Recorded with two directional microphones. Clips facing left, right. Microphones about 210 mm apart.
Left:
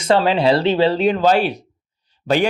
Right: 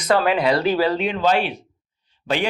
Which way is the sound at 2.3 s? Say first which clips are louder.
Left 5 dB; 40° left (ahead or behind).